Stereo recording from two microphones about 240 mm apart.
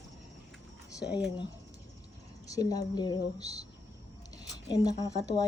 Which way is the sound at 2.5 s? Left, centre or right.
Centre.